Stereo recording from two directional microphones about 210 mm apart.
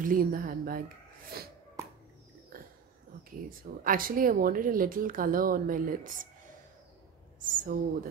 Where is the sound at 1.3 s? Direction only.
45° right (ahead or behind).